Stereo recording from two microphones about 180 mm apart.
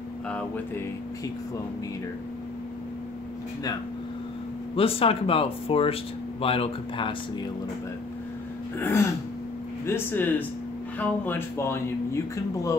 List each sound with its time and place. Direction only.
4.7 s speech: 30° left (ahead or behind)
8.7 s speech: 15° left (ahead or behind)